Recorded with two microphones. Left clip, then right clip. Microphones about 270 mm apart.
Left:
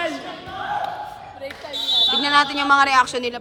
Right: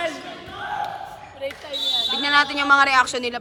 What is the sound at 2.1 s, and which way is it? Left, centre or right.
A woman's voice, centre.